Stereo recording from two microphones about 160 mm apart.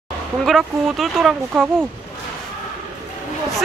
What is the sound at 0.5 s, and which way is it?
Speech, centre (ahead or behind).